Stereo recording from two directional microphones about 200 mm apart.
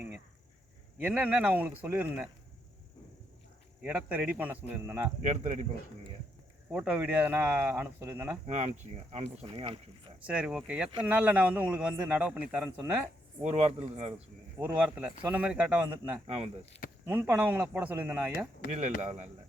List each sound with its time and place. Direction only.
0.9 s a man's voice: 5° right (ahead or behind)
3.8 s a man's voice: 5° right (ahead or behind)
5.2 s speech: 35° right (ahead or behind)
6.7 s a man's voice: 10° right (ahead or behind)
8.4 s speech: 35° right (ahead or behind)
10.2 s a man's voice: 5° right (ahead or behind)
13.4 s speech: 35° right (ahead or behind)
14.8 s a man's voice: 10° right (ahead or behind)
16.2 s speech: 30° right (ahead or behind)
17.1 s a man's voice: 10° right (ahead or behind)
19.0 s speech: 35° right (ahead or behind)